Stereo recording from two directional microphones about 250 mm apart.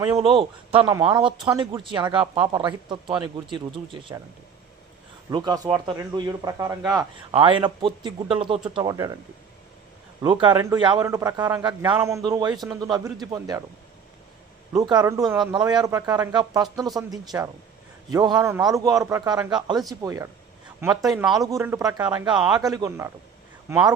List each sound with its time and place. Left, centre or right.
0.2 s a man's voice: right
5.3 s a man's voice: centre
10.2 s a man's voice: centre
14.7 s a man's voice: centre